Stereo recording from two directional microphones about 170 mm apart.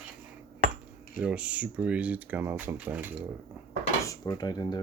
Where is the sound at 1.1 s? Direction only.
10° right (ahead or behind).